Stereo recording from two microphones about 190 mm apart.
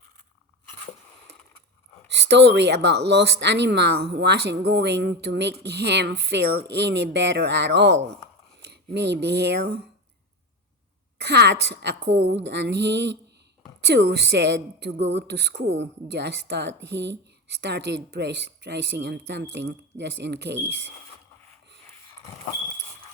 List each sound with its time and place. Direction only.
2.0 s a woman's voice: 65° right (ahead or behind)
11.2 s a woman's voice: 60° right (ahead or behind)
22.1 s smoke detector: 20° left (ahead or behind)